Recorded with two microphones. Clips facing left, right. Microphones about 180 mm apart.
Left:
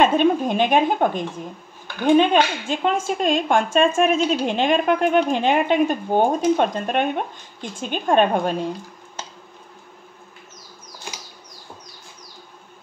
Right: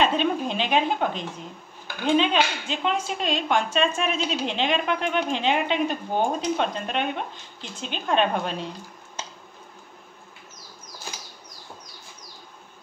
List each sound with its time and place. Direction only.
0.0 s speech: 50° left (ahead or behind)